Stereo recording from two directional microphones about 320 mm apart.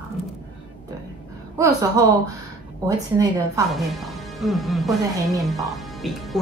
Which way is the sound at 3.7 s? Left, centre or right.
Centre.